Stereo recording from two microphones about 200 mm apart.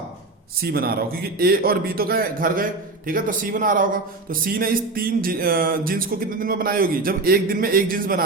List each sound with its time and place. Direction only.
0.6 s a man's voice: 50° right (ahead or behind)